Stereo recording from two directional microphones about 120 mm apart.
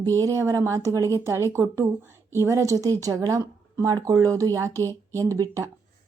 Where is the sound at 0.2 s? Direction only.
25° right (ahead or behind).